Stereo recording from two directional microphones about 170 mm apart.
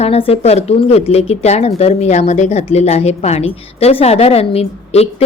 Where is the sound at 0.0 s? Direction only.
35° left (ahead or behind).